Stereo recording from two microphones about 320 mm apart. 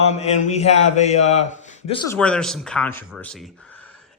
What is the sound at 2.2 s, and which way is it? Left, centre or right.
Speech, centre.